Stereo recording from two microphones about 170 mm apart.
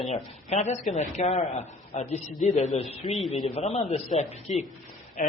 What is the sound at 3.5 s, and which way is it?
A man's voice, 40° left (ahead or behind).